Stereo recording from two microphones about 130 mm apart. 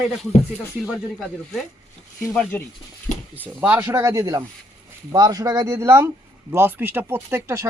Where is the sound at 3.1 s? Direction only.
70° left (ahead or behind).